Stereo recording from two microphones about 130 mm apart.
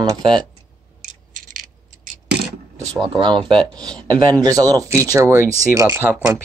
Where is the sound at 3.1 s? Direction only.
40° right (ahead or behind).